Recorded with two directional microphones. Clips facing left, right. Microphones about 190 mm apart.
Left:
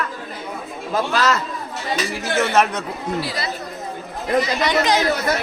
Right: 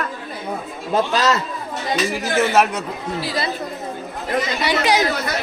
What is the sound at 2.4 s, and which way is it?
Speech, 5° right (ahead or behind).